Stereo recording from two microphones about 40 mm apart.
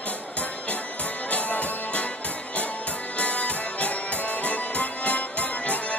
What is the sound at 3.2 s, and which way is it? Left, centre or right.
Music, left.